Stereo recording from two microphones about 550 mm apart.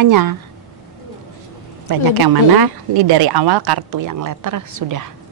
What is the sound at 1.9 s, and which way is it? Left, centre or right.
Speech, right.